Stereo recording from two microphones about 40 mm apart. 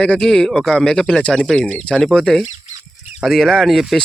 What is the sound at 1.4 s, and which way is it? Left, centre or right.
Speech, centre.